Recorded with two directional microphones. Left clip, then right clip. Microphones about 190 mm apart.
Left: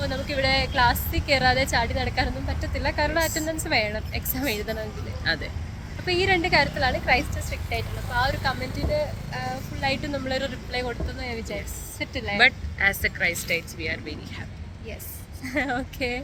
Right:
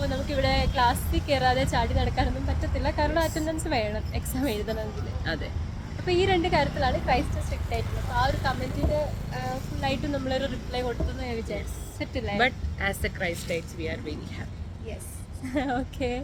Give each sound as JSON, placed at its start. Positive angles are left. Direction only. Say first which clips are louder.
{"t": 0.0, "sound": "a woman's voice", "louder": "left 2 dB", "side_deg": 5}
{"t": 5.2, "sound": "speech", "louder": "left 6 dB", "side_deg": -15}
{"t": 6.1, "sound": "a woman's voice", "louder": "left 2 dB", "side_deg": 0}
{"t": 12.4, "sound": "speech", "louder": "left 7 dB", "side_deg": -15}
{"t": 15.4, "sound": "a woman's voice", "louder": "left 2 dB", "side_deg": 0}